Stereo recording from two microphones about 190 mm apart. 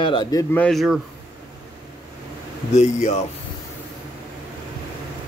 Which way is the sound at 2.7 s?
35° left (ahead or behind).